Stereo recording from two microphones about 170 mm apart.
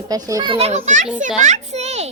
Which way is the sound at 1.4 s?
45° right (ahead or behind).